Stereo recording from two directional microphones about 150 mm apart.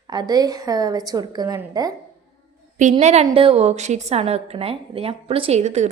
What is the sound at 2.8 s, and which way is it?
A woman's voice, 55° right (ahead or behind).